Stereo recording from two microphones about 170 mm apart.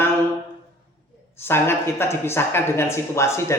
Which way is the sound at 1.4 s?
15° left (ahead or behind).